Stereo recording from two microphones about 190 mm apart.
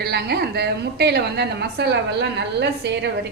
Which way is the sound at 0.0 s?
60° right (ahead or behind).